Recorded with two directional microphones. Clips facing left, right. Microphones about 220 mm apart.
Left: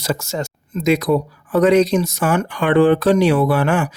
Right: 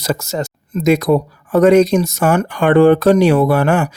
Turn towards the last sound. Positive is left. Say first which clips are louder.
# right 3 dB
turn(degrees=-40)  # may be behind; listen again after turning